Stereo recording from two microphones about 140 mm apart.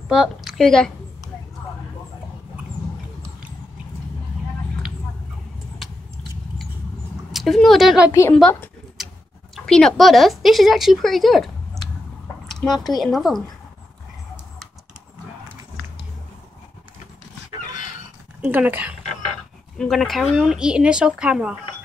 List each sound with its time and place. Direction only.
0.1 s a woman's voice: 5° right (ahead or behind)
7.3 s a woman's voice: centre (ahead or behind)
8.1 s a woman's voice: 20° left (ahead or behind)
8.4 s speech: 10° left (ahead or behind)
9.0 s tick-tock: 5° right (ahead or behind)
9.7 s a woman's voice: 5° left (ahead or behind)
12.4 s a sound: 5° left (ahead or behind)
13.0 s a woman's voice: centre (ahead or behind)
18.4 s speech: 15° right (ahead or behind)
19.8 s a woman's voice: centre (ahead or behind)